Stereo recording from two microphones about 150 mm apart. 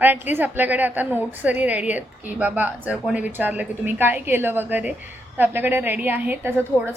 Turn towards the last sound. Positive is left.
turn(degrees=-15)  # may be behind; listen again after turning